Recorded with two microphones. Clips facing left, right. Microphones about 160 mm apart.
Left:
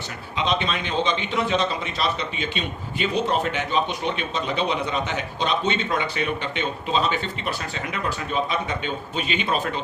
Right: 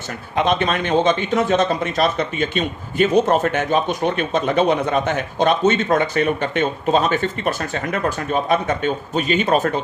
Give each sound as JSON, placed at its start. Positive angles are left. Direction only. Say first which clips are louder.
{"t": 0.3, "sound": "a man's voice", "louder": "right 6 dB", "side_deg": -50}